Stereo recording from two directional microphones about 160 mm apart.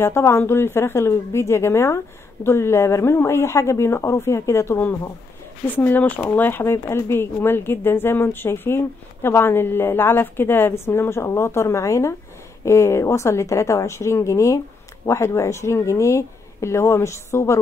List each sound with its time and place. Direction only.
0.0 s speech: 15° left (ahead or behind)